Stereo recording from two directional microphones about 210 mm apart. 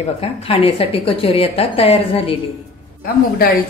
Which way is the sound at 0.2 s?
30° left (ahead or behind).